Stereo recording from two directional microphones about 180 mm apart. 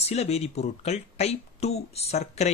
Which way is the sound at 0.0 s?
35° left (ahead or behind).